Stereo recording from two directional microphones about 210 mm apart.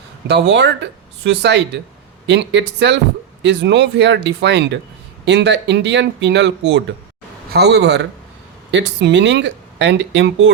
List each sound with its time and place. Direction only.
0.3 s speech: 55° right (ahead or behind)